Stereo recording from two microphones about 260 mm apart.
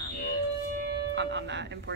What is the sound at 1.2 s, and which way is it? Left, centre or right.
Speech, right.